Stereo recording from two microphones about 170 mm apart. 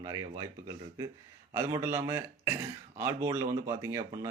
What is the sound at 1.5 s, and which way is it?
A man's voice, 15° right (ahead or behind).